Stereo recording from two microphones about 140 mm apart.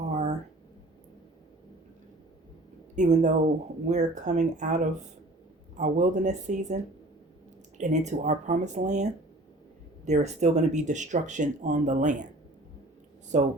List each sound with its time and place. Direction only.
0.1 s a sound: 55° right (ahead or behind)
2.9 s speech: 60° right (ahead or behind)
13.3 s speech: 60° right (ahead or behind)